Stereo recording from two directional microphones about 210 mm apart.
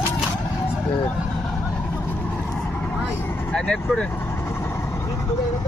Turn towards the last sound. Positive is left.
turn(degrees=5)  # may be behind; listen again after turning